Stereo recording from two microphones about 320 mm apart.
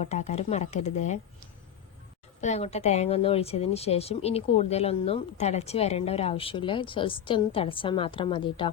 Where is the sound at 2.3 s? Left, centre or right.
Left.